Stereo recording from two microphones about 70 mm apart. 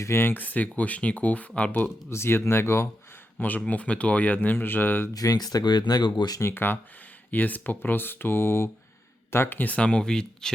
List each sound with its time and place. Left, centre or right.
0.0 s speech: left
2.0 s speech: left
3.4 s speech: left
5.1 s speech: left
6.4 s speech: left; by 10.5 s centre